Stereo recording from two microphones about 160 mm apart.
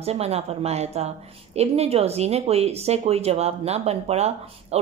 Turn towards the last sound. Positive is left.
turn(degrees=-40)  # may be behind; listen again after turning